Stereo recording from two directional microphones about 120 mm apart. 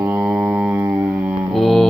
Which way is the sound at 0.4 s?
10° right (ahead or behind).